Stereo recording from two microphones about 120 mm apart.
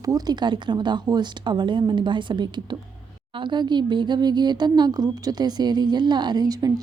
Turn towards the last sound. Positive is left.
turn(degrees=-30)  # may be behind; listen again after turning